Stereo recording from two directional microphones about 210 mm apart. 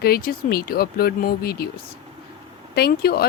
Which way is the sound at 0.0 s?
45° left (ahead or behind).